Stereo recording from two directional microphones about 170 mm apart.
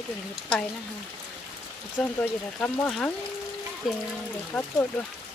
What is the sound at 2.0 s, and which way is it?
Speech, centre (ahead or behind).